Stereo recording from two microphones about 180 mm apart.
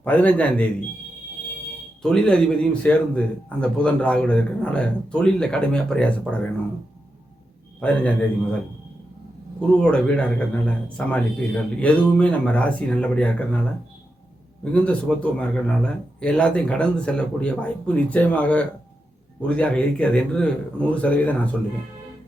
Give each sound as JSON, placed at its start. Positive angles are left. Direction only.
{"t": 0.0, "sound": "a man's voice", "side_deg": 10}
{"t": 2.0, "sound": "a man's voice", "side_deg": 5}
{"t": 7.8, "sound": "a man's voice", "side_deg": 5}
{"t": 9.6, "sound": "a man's voice", "side_deg": 5}